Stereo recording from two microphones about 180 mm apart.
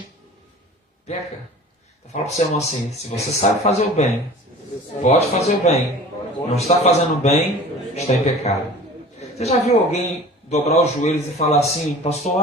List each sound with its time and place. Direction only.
2.1 s a man's voice: 40° left (ahead or behind)